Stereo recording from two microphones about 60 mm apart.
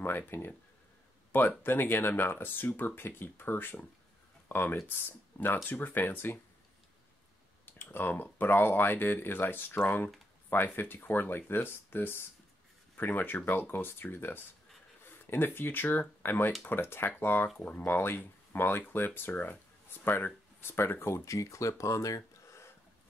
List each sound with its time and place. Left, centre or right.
0.3 s speech: left
1.6 s speech: left
7.6 s speech: left